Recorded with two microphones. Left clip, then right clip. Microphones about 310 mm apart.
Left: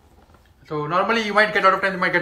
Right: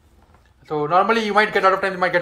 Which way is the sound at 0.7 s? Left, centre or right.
Centre.